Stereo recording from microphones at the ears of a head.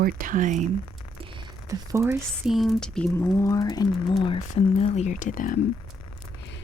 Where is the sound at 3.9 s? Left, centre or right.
Left.